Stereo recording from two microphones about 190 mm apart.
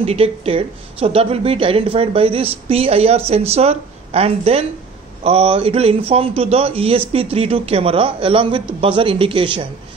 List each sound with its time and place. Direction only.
0.0 s a man's voice: 30° right (ahead or behind)